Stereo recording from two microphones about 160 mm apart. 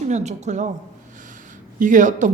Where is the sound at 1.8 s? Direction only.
55° right (ahead or behind).